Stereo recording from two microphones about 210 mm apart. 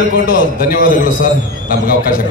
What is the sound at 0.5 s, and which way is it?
A man's voice, 40° left (ahead or behind).